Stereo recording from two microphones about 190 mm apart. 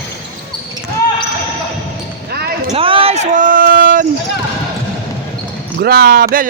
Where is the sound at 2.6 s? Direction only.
30° right (ahead or behind); by 4.0 s 50° right (ahead or behind).